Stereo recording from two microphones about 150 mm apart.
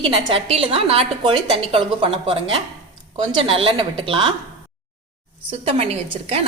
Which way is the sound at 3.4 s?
40° right (ahead or behind).